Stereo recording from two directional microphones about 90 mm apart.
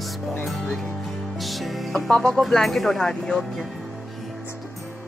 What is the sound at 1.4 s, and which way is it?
Speech, centre (ahead or behind).